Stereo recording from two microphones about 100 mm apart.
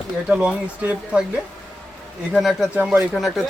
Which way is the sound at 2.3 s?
Centre (ahead or behind).